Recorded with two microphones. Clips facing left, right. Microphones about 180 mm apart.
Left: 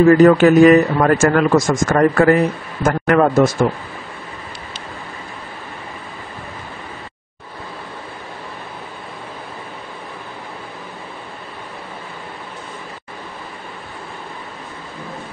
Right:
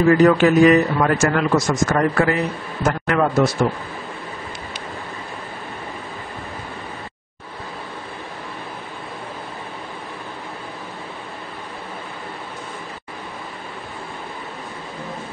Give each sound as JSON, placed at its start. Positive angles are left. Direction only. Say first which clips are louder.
{"t": 0.2, "sound": "a man's voice", "louder": "left 4 dB", "side_deg": 50}